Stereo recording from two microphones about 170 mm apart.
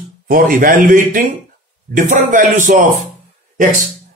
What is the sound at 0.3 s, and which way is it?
Speech, 55° right (ahead or behind).